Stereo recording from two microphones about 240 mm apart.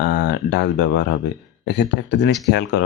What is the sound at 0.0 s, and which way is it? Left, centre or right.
Speech, left.